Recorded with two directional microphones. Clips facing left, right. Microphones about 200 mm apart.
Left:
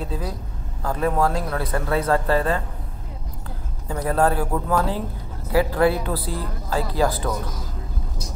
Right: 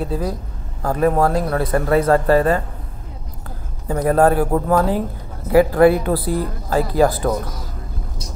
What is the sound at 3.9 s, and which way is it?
A man's voice, 55° right (ahead or behind).